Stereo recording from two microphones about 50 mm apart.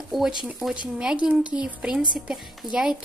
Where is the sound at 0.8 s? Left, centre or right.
Centre.